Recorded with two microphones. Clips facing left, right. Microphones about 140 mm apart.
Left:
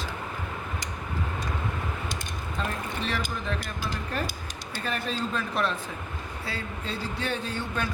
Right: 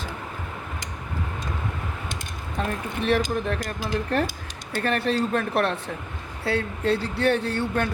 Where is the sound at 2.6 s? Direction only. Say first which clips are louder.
Right 5 dB; 60° right (ahead or behind).